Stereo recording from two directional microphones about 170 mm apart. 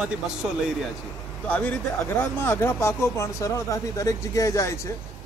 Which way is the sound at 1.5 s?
10° left (ahead or behind).